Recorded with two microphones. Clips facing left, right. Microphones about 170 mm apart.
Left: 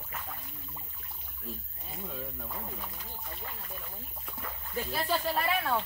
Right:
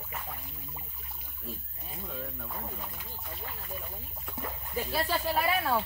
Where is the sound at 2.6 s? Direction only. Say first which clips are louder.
Right 1 dB; 5° right (ahead or behind).